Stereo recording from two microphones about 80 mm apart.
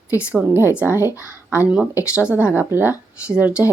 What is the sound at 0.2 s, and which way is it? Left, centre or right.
Speech, centre.